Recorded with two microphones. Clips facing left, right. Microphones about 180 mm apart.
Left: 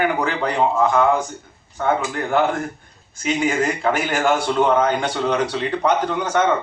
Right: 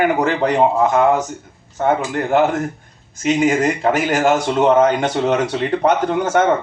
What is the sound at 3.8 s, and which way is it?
A man's voice, 40° right (ahead or behind).